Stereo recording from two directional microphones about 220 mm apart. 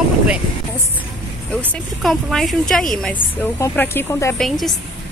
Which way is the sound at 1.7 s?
Centre (ahead or behind).